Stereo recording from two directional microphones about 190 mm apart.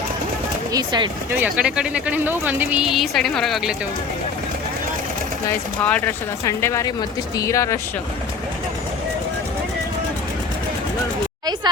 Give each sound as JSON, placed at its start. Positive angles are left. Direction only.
{"t": 0.7, "sound": "speech", "side_deg": -20}
{"t": 1.3, "sound": "speech", "side_deg": -10}
{"t": 5.8, "sound": "speech", "side_deg": 10}